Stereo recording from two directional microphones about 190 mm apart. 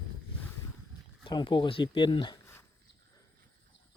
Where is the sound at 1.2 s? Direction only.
25° left (ahead or behind).